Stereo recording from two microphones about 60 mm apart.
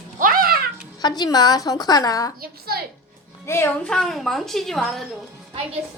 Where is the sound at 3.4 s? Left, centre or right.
Left.